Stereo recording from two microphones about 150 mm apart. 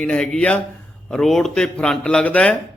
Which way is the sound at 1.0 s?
5° left (ahead or behind).